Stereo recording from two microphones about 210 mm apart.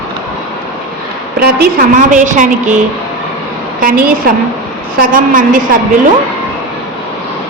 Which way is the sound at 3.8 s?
40° right (ahead or behind).